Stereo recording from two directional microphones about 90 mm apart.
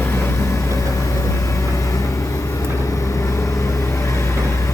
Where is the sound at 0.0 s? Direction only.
25° left (ahead or behind).